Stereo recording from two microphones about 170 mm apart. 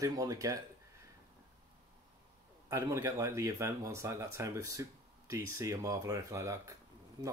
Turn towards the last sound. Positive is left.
turn(degrees=-25)  # may be behind; listen again after turning